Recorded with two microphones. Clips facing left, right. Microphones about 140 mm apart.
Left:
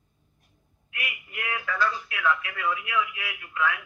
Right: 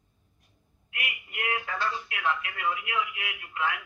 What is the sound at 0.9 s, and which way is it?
A man's voice, 25° right (ahead or behind).